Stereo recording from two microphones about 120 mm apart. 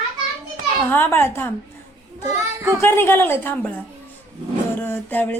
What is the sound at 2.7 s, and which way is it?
Speech, 20° left (ahead or behind).